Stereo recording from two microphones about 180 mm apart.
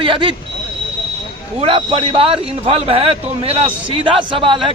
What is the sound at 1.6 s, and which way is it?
A man's voice, 30° right (ahead or behind).